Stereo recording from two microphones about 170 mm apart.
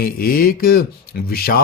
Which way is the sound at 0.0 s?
60° left (ahead or behind).